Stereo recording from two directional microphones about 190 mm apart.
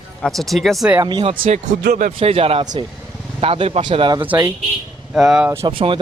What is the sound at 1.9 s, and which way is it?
Speech, 45° right (ahead or behind).